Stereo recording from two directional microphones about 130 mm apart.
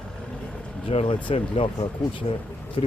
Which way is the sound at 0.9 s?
45° left (ahead or behind).